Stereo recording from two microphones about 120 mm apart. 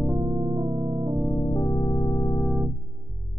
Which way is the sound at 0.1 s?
35° right (ahead or behind).